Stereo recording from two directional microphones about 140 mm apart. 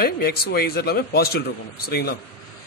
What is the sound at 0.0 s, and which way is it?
A man's voice, 90° left.